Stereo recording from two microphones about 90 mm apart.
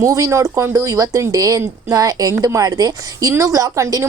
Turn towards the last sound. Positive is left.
turn(degrees=-35)  # may be behind; listen again after turning